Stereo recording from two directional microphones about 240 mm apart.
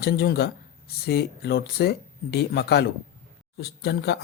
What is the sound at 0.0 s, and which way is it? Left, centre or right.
Speech, left.